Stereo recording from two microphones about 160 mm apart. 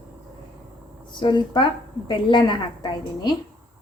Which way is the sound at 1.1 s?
30° left (ahead or behind).